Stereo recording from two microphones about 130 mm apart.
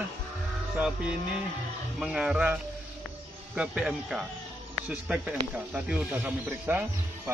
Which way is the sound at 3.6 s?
10° right (ahead or behind).